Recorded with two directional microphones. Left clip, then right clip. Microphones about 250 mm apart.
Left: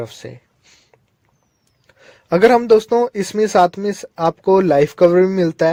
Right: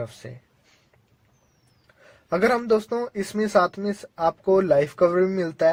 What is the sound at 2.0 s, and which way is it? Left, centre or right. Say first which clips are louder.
Speech: left 9 dB; left.